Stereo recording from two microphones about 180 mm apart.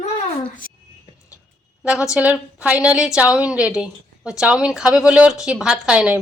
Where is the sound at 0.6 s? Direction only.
50° left (ahead or behind).